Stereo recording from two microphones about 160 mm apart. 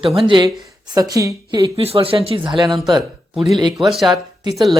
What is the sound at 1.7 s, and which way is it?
Speech, 35° right (ahead or behind).